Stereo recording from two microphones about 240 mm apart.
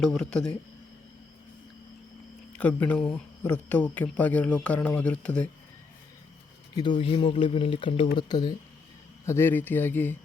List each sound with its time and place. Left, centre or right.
0.0 s speech: centre
2.5 s speech: centre
6.7 s a man's voice: centre